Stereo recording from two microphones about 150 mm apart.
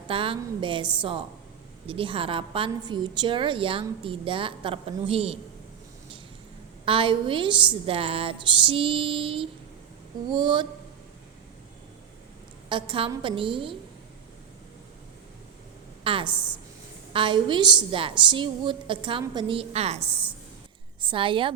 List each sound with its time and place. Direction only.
0.1 s a woman's voice: 35° right (ahead or behind)
6.8 s a woman's voice: 35° right (ahead or behind)
12.6 s a woman's voice: 35° right (ahead or behind)
16.0 s a woman's voice: 35° right (ahead or behind)